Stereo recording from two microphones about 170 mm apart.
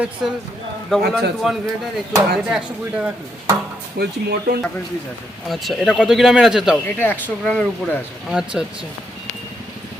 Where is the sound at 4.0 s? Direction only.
70° right (ahead or behind).